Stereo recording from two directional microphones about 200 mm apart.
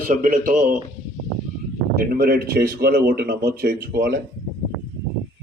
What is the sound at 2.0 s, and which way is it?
Speech, 50° right (ahead or behind).